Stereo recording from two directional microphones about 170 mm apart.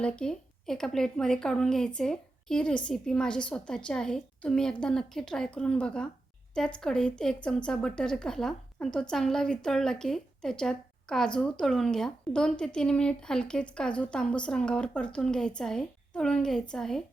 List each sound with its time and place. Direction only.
0.0 s speech: 5° left (ahead or behind)